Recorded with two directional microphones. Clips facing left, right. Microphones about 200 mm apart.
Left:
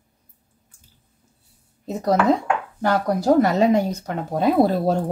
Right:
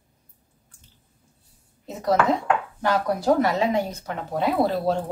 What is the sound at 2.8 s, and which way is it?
Speech, 40° left (ahead or behind).